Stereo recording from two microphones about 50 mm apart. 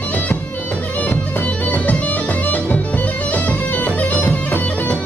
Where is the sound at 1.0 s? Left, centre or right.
Left.